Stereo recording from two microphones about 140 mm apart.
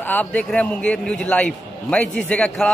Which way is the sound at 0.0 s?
10° left (ahead or behind).